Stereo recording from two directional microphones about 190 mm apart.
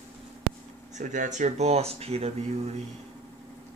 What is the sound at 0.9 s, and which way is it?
Speech, 40° right (ahead or behind).